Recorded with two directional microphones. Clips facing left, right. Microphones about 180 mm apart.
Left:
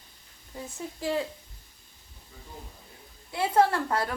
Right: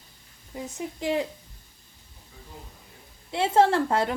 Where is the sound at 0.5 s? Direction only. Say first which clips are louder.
Right 4 dB; 20° right (ahead or behind).